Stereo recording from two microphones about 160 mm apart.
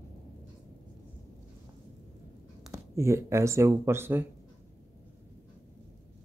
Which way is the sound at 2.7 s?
15° right (ahead or behind).